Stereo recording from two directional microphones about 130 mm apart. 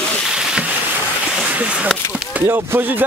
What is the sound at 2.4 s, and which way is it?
Speech, 20° right (ahead or behind).